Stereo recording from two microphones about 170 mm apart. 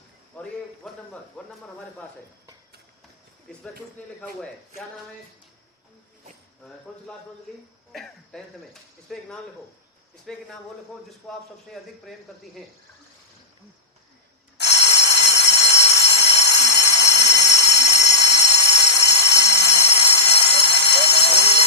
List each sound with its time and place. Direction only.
0.4 s a sound: 5° left (ahead or behind)
1.4 s speech: 5° left (ahead or behind)
4.2 s speech: centre (ahead or behind)
7.9 s speech: centre (ahead or behind)
14.6 s telephone bell ringing: 90° left
15.7 s a sound: 90° left